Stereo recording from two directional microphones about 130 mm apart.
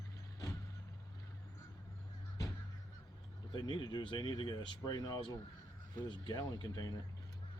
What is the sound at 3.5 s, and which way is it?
Speech, 35° left (ahead or behind).